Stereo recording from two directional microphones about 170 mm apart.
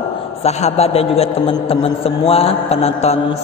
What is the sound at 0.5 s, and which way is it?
A man's voice, 40° left (ahead or behind).